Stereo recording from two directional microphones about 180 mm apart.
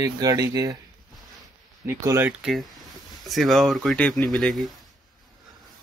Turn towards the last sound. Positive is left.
turn(degrees=0)  # may be behind; listen again after turning